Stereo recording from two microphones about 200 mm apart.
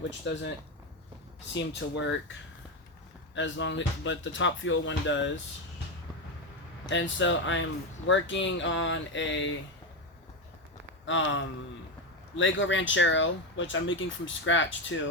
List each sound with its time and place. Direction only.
0.3 s speech: 65° left (ahead or behind)
1.5 s speech: 65° left (ahead or behind)
3.3 s speech: 65° left (ahead or behind)
6.9 s speech: 65° left (ahead or behind)
11.0 s speech: 70° left (ahead or behind)